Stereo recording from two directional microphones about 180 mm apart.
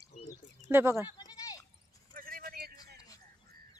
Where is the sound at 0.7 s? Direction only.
15° right (ahead or behind).